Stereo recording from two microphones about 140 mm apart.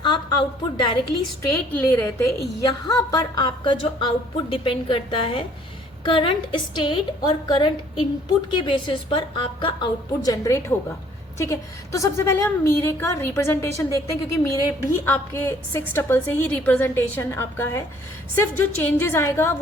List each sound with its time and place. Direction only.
0.0 s a woman's voice: 30° left (ahead or behind)
1.5 s a woman's voice: 15° left (ahead or behind)